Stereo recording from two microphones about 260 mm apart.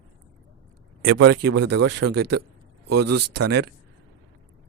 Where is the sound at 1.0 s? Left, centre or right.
Right.